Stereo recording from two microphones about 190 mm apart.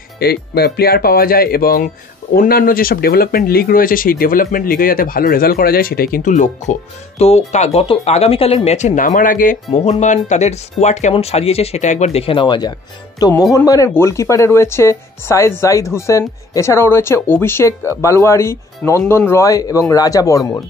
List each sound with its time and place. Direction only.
0.2 s speech: 55° left (ahead or behind); by 20.6 s 15° left (ahead or behind)